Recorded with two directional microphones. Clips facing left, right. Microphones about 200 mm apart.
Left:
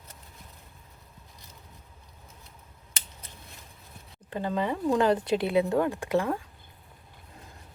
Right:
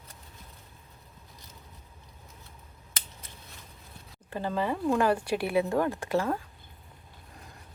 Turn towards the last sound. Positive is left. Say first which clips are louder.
# left 1 dB
turn(degrees=15)  # may be behind; listen again after turning